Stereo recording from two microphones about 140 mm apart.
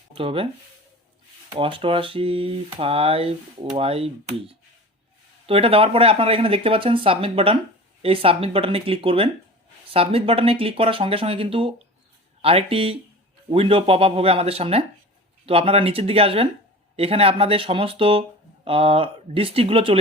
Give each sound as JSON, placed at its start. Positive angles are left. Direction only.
{"t": 0.1, "sound": "speech", "side_deg": -40}
{"t": 1.5, "sound": "speech", "side_deg": -40}